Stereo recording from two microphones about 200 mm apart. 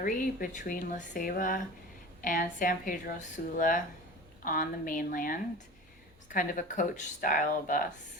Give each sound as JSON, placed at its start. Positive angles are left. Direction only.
{"t": 0.0, "sound": "speech", "side_deg": 45}